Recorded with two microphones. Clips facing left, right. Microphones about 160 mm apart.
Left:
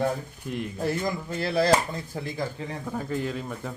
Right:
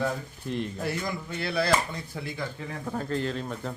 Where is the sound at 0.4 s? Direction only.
10° left (ahead or behind).